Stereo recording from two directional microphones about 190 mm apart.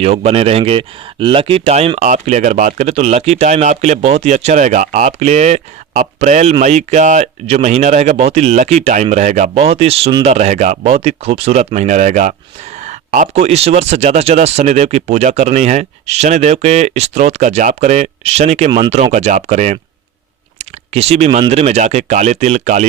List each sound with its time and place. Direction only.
0.0 s speech: 35° right (ahead or behind)
20.6 s a sound: 35° right (ahead or behind)
21.5 s speech: 35° right (ahead or behind)